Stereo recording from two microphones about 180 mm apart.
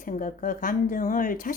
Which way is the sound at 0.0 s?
45° left (ahead or behind).